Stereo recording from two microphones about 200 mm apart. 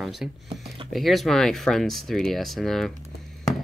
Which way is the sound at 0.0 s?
Centre (ahead or behind).